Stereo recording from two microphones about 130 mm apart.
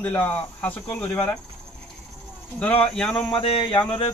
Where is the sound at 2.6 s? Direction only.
10° left (ahead or behind).